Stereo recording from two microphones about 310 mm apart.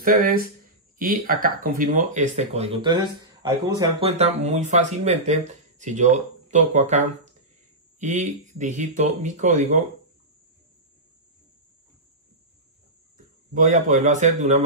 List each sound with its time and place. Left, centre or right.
0.0 s speech: right
13.5 s speech: right